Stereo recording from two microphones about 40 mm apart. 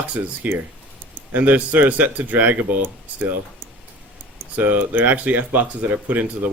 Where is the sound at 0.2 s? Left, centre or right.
Right.